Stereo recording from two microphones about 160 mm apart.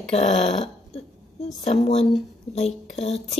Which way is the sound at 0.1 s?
45° left (ahead or behind).